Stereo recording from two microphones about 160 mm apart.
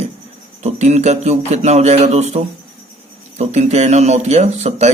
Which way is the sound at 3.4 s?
45° right (ahead or behind).